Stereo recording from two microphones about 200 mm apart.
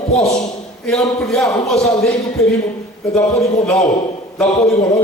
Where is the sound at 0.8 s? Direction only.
Centre (ahead or behind).